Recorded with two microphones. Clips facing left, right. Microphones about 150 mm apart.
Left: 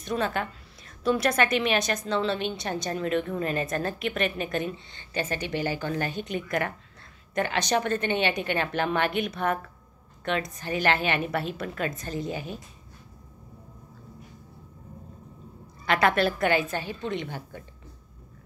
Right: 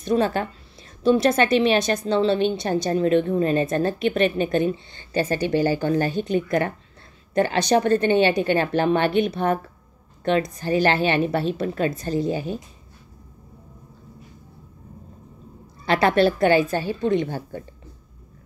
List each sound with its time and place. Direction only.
0.0 s a woman's voice: 35° right (ahead or behind)
15.8 s a woman's voice: 30° right (ahead or behind)